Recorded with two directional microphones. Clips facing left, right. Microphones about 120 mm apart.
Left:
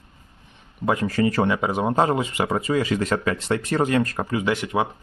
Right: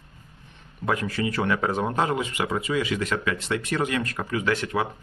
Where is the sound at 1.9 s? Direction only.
30° left (ahead or behind).